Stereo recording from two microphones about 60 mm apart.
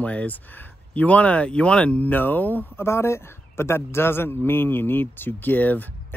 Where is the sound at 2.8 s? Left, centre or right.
Left.